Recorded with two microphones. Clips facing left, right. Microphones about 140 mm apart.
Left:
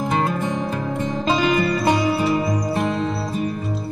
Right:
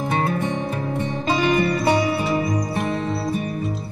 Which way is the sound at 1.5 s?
25° right (ahead or behind).